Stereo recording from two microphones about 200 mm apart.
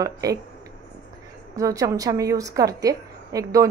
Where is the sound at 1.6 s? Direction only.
15° right (ahead or behind).